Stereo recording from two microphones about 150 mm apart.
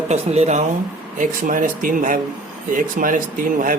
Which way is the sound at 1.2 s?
60° right (ahead or behind).